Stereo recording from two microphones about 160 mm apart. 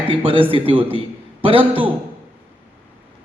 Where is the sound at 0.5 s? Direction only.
35° right (ahead or behind).